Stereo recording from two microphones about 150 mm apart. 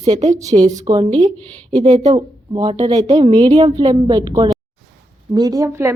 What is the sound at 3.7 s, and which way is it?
Speech, 25° right (ahead or behind).